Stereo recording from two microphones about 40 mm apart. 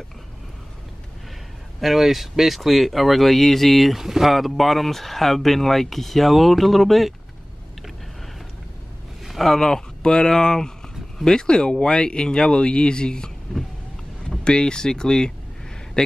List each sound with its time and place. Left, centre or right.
1.8 s speech: centre
9.2 s a sound: centre
9.6 s speech: centre
14.4 s speech: left